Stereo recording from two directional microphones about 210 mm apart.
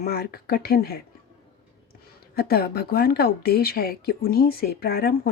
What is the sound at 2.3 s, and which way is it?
Speech, 50° left (ahead or behind).